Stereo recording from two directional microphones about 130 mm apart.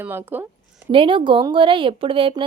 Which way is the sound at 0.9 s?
40° right (ahead or behind).